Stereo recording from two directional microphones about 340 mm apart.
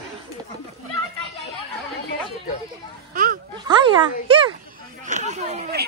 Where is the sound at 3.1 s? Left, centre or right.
Right.